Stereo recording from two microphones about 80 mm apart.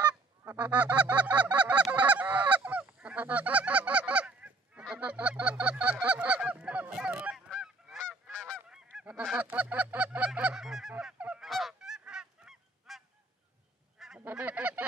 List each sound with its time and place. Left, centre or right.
0.0 s goose: centre
8.3 s goose: centre
8.6 s goose: centre
11.4 s goose: centre
13.9 s honk: centre
14.3 s goose: centre